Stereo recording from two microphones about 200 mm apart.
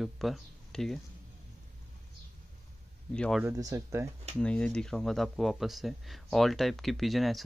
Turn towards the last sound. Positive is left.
turn(degrees=0)  # may be behind; listen again after turning